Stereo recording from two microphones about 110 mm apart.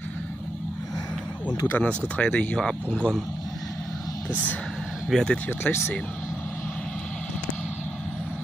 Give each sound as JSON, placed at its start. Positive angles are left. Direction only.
{"t": 1.7, "sound": "speech", "side_deg": 15}
{"t": 5.1, "sound": "speech", "side_deg": 5}
{"t": 5.5, "sound": "speech", "side_deg": 20}